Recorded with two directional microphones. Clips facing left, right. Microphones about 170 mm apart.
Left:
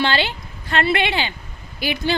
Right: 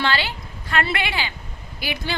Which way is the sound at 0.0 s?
20° left (ahead or behind).